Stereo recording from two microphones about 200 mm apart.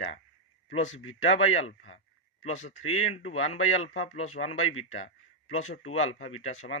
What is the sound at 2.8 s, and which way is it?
Speech, 90° left.